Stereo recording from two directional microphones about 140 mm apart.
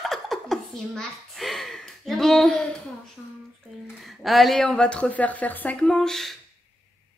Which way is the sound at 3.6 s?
Centre (ahead or behind).